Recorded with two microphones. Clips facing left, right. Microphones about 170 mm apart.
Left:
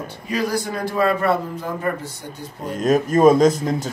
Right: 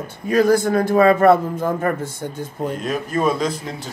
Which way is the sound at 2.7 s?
45° left (ahead or behind).